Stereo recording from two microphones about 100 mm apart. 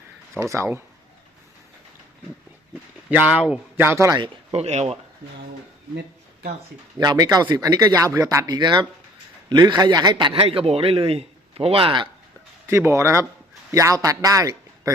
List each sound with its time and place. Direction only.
0.5 s speech: 30° right (ahead or behind)
3.1 s a man's voice: 15° right (ahead or behind)
3.8 s speech: 30° right (ahead or behind)
4.5 s speech: 90° right
7.0 s speech: 40° right (ahead or behind)
8.5 s a man's voice: 45° right (ahead or behind)
10.4 s a man's voice: 85° right; by 12.0 s 60° right (ahead or behind)
12.6 s a man's voice: 25° right (ahead or behind)